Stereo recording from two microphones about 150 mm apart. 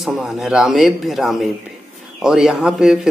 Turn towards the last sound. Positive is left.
turn(degrees=-5)  # may be behind; listen again after turning